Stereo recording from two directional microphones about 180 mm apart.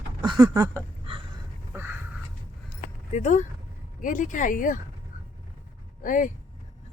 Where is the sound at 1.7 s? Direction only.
10° right (ahead or behind).